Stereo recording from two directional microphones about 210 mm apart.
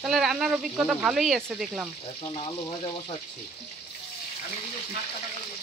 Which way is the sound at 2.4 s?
20° left (ahead or behind).